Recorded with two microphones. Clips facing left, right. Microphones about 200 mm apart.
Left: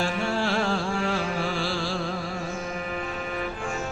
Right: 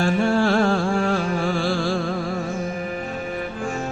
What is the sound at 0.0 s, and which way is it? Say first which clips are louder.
Music: right 7 dB; 50° right (ahead or behind).